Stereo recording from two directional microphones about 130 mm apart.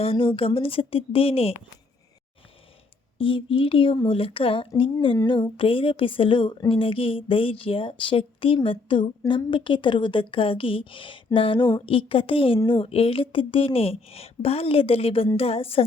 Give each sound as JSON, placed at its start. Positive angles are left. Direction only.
{"t": 0.0, "sound": "speech", "side_deg": 45}
{"t": 3.2, "sound": "a woman's voice", "side_deg": 40}